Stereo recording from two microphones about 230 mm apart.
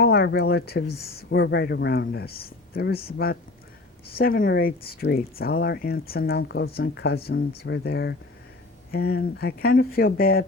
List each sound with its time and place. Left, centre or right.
0.0 s speech: left